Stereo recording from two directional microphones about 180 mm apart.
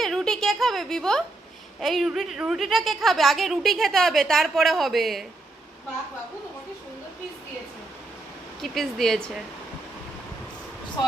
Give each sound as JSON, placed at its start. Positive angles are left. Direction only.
{"t": 0.0, "sound": "a sound", "side_deg": 0}
{"t": 1.8, "sound": "a woman's voice", "side_deg": 0}
{"t": 8.6, "sound": "a woman's voice", "side_deg": 0}